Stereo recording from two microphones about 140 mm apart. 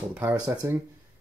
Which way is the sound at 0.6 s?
20° right (ahead or behind).